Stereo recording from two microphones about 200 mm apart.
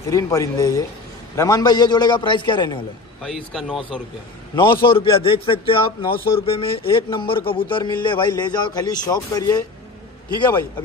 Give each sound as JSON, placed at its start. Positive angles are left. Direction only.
{"t": 0.0, "sound": "a man's voice", "side_deg": 15}
{"t": 3.2, "sound": "speech", "side_deg": 0}
{"t": 4.6, "sound": "a man's voice", "side_deg": 25}